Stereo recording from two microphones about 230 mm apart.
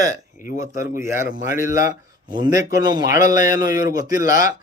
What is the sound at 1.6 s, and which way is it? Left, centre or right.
Speech, centre.